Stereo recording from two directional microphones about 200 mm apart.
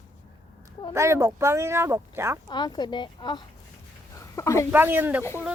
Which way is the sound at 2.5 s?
20° left (ahead or behind).